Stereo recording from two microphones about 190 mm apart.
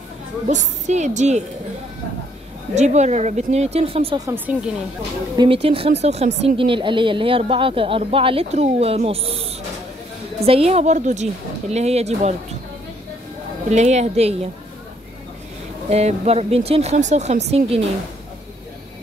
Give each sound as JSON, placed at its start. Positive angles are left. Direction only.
{"t": 0.5, "sound": "speech", "side_deg": -40}
{"t": 2.7, "sound": "speech", "side_deg": -35}
{"t": 4.5, "sound": "speech", "side_deg": -5}
{"t": 5.4, "sound": "a woman's voice", "side_deg": -30}
{"t": 13.7, "sound": "speech", "side_deg": -35}
{"t": 15.9, "sound": "speech", "side_deg": -35}